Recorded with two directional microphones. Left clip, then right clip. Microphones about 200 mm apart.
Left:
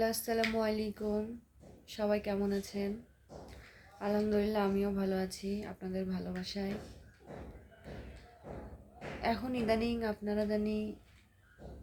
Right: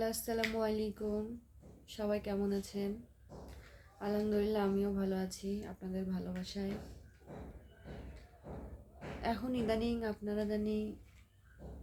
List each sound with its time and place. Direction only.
0.0 s speech: 15° left (ahead or behind)
4.0 s speech: 10° left (ahead or behind)
9.2 s speech: 15° left (ahead or behind)